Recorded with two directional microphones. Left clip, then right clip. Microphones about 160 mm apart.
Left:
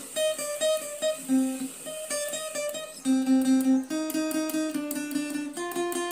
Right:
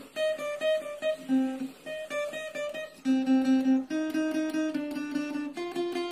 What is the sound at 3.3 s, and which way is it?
Music, 30° left (ahead or behind).